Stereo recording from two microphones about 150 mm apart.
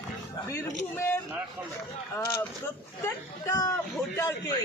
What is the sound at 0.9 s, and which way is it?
Speech, 15° left (ahead or behind).